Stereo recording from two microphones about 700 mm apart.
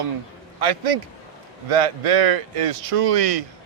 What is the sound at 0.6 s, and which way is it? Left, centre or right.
Speech, right.